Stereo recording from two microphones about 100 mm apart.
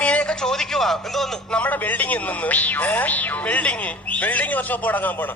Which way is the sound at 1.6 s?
15° left (ahead or behind).